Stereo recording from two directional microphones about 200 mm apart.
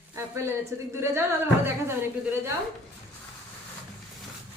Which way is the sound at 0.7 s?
15° right (ahead or behind).